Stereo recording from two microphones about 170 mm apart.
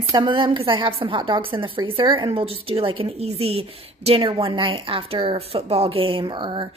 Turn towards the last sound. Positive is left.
turn(degrees=-30)  # may be behind; listen again after turning